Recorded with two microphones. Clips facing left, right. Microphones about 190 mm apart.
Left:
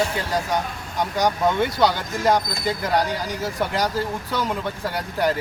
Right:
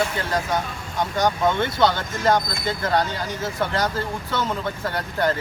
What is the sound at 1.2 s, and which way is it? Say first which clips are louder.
Speech: left 1 dB; 10° left (ahead or behind).